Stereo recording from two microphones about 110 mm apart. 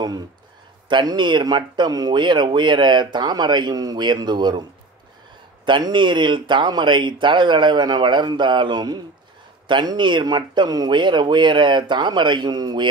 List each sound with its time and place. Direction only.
0.0 s speech: 40° right (ahead or behind)
5.7 s speech: 45° right (ahead or behind)